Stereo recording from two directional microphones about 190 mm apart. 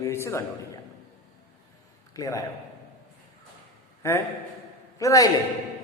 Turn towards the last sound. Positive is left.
turn(degrees=15)  # may be behind; listen again after turning